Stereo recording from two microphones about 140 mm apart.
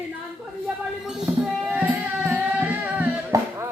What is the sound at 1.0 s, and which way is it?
Music, 5° right (ahead or behind).